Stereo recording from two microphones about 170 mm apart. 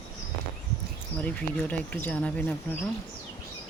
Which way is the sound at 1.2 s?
10° left (ahead or behind).